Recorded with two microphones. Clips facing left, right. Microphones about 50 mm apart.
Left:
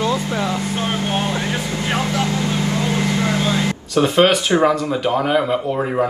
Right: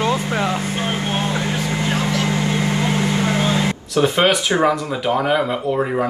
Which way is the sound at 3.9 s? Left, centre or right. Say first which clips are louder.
Left 2 dB; centre.